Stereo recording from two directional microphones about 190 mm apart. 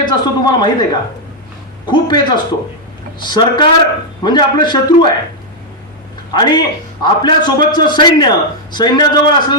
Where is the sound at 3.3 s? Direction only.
25° left (ahead or behind).